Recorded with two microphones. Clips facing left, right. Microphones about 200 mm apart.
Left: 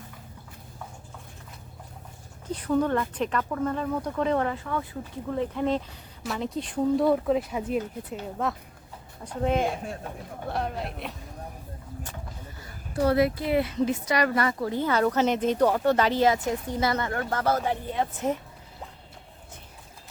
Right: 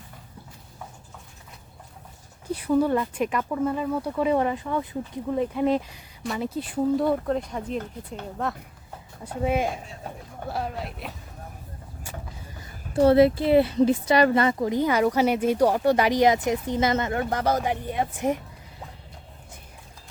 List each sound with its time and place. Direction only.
2.5 s speech: 10° right (ahead or behind)
12.9 s speech: 25° right (ahead or behind)